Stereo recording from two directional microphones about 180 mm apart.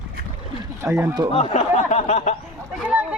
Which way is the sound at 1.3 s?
40° left (ahead or behind).